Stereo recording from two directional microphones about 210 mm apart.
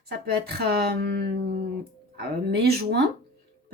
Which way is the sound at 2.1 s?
50° right (ahead or behind).